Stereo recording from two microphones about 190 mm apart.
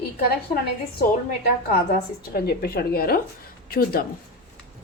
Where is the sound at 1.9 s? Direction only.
55° left (ahead or behind).